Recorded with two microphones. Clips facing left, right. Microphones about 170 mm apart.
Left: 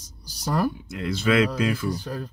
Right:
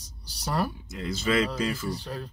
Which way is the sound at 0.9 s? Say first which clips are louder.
Left 4 dB; 60° left (ahead or behind).